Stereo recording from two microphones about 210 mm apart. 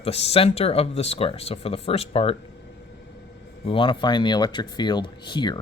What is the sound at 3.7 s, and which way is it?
Speech, 25° left (ahead or behind).